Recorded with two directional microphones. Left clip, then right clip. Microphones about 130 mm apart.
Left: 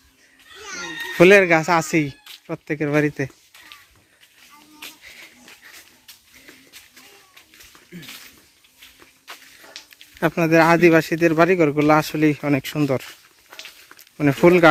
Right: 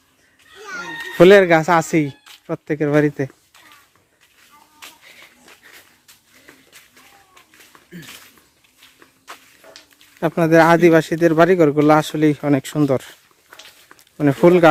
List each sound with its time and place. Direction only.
1.1 s speech: 25° right (ahead or behind)
10.3 s speech: 25° right (ahead or behind)
14.4 s speech: 15° right (ahead or behind)